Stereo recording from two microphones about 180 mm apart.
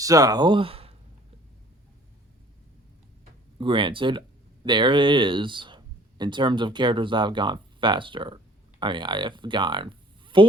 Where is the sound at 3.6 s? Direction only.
25° right (ahead or behind).